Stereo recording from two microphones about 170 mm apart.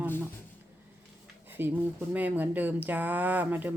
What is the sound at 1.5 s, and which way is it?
Speech, 10° right (ahead or behind).